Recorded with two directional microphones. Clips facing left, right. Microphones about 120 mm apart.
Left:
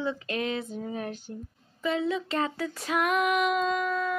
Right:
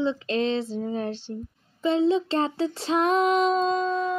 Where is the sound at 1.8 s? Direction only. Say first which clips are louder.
Right 7 dB; 30° right (ahead or behind).